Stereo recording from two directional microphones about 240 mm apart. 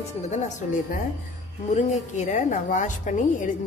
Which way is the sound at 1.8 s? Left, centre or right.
Left.